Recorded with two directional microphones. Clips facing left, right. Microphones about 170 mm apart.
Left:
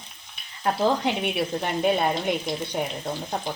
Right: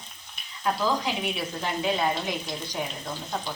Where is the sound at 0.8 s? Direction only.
60° left (ahead or behind).